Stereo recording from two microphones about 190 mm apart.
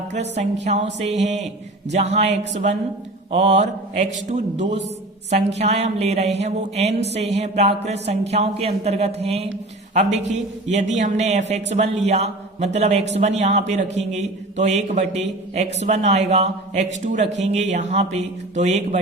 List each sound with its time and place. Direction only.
0.1 s a man's voice: 35° right (ahead or behind)